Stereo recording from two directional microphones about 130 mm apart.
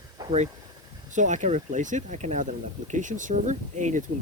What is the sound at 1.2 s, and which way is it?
Speech, 70° right (ahead or behind).